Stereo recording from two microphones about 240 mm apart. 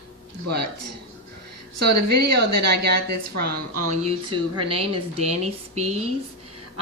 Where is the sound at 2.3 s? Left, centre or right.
Right.